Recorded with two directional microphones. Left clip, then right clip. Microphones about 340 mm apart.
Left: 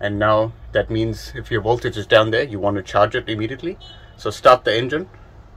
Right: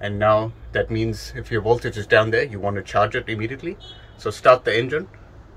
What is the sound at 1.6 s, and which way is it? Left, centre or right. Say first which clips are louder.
Speech: even; left.